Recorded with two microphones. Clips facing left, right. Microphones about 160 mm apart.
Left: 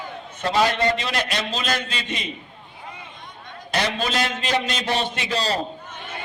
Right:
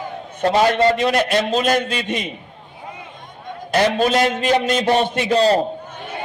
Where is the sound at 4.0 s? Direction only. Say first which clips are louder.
Right 8 dB; 50° right (ahead or behind).